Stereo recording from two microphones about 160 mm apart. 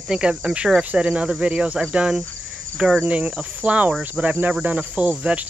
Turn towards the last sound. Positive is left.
turn(degrees=-10)  # may be behind; listen again after turning